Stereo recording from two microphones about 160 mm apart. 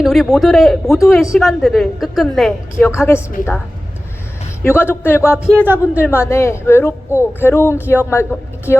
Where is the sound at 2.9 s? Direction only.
15° left (ahead or behind).